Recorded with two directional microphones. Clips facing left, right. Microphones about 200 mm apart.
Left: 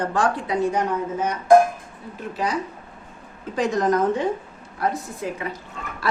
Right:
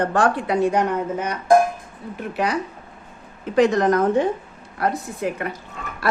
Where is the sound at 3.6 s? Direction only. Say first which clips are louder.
Right 4 dB; 70° right (ahead or behind).